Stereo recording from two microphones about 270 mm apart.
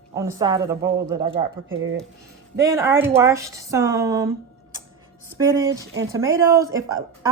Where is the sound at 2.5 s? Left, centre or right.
Centre.